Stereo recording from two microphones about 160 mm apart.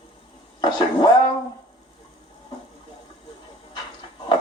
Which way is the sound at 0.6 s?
25° left (ahead or behind).